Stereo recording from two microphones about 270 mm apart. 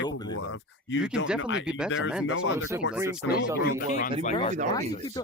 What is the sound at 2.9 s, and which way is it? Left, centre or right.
Speech, centre.